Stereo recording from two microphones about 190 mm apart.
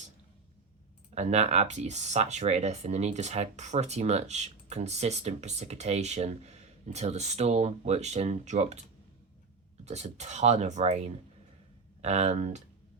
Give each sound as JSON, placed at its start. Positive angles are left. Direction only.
{"t": 1.1, "sound": "speech", "side_deg": -35}
{"t": 9.8, "sound": "speech", "side_deg": -35}